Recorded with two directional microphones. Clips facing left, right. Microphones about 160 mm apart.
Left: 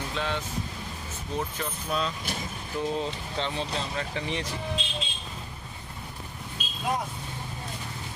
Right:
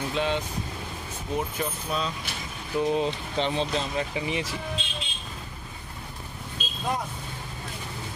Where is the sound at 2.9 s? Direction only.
20° right (ahead or behind).